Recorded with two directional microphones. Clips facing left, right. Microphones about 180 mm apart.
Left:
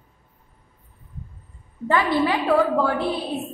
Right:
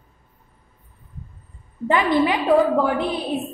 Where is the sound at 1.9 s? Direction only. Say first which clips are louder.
Right 2 dB; 15° right (ahead or behind).